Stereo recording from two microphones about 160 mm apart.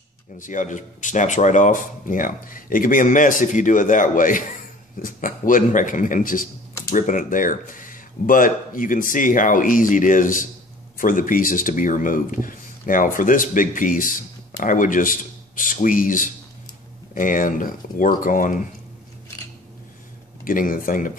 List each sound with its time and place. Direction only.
0.4 s speech: 50° left (ahead or behind)
20.4 s speech: 60° left (ahead or behind)